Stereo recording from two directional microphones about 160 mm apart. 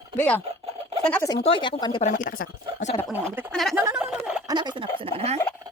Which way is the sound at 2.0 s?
50° left (ahead or behind).